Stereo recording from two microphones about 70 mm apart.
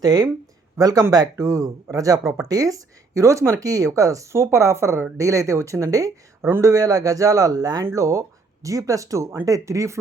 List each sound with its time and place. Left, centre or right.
0.0 s speech: right
6.4 s speech: right
7.9 s speech: right